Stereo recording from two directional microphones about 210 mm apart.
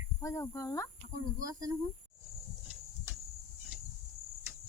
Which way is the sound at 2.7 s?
10° right (ahead or behind).